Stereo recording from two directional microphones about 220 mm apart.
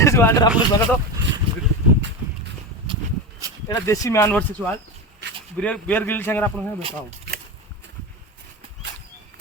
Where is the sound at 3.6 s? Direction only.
15° left (ahead or behind).